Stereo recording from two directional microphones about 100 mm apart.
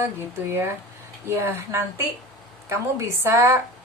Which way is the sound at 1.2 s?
25° right (ahead or behind).